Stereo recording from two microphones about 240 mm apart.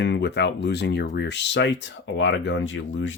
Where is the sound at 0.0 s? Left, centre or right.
Left.